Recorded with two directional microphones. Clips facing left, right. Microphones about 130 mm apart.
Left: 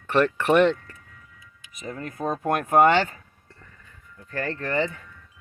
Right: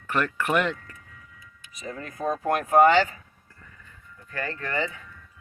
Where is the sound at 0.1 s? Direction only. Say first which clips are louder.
Left 5 dB; 30° left (ahead or behind).